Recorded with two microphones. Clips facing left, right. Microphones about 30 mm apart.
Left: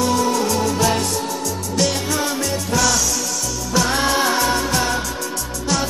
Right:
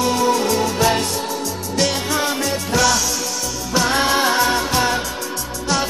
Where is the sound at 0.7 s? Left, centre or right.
Centre.